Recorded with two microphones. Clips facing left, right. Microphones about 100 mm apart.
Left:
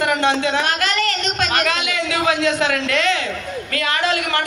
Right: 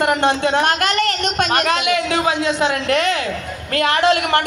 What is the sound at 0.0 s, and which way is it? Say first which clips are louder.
Speech: right 2 dB; 45° right (ahead or behind).